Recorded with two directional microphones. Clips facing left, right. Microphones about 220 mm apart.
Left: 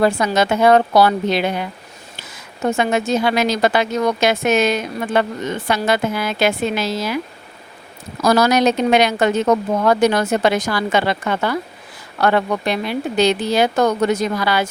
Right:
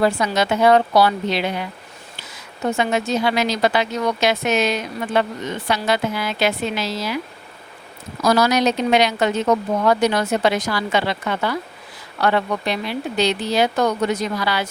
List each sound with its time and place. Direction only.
0.0 s speech: 50° left (ahead or behind)
2.6 s speech: 50° left (ahead or behind)
8.2 s speech: 50° left (ahead or behind)